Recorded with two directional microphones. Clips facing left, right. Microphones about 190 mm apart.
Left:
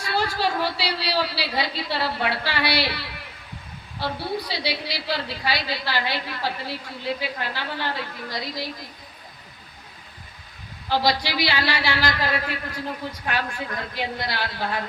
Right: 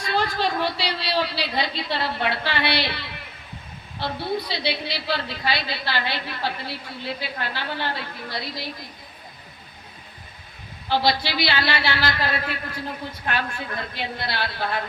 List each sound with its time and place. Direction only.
0.3 s a sound: 10° left (ahead or behind)
4.0 s a woman's voice: 10° left (ahead or behind)
10.8 s a woman's voice: 15° left (ahead or behind)